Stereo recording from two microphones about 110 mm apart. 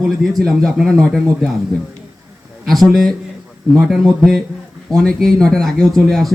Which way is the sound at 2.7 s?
5° left (ahead or behind).